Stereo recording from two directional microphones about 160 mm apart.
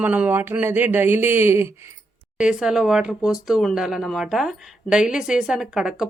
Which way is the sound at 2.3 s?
5° right (ahead or behind).